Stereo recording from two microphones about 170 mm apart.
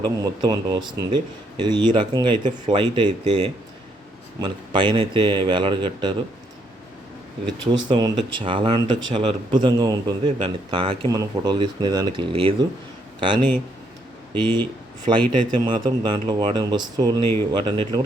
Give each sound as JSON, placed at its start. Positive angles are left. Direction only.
{"t": 0.0, "sound": "speech", "side_deg": -25}
{"t": 7.4, "sound": "speech", "side_deg": -25}